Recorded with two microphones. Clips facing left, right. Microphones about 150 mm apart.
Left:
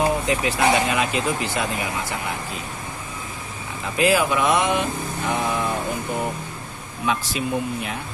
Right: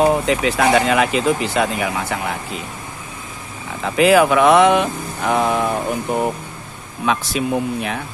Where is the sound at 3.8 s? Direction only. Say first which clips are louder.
Right 7 dB; 65° right (ahead or behind).